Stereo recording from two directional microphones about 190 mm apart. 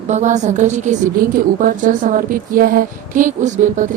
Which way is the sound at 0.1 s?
40° right (ahead or behind).